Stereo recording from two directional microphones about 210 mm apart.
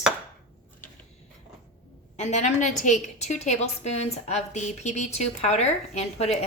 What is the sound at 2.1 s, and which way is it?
A woman's voice, 35° left (ahead or behind).